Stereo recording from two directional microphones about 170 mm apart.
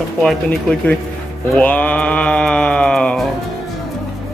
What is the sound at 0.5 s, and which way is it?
Speech, 10° left (ahead or behind).